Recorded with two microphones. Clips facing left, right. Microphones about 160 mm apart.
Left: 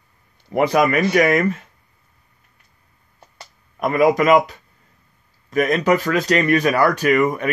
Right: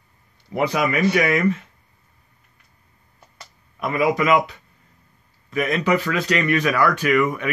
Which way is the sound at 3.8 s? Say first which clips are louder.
Left 4 dB; 45° left (ahead or behind).